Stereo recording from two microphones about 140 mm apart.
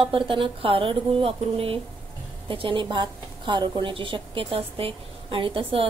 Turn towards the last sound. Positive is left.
turn(degrees=-40)  # may be behind; listen again after turning